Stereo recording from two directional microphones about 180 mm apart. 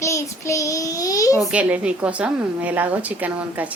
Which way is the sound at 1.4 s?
5° right (ahead or behind).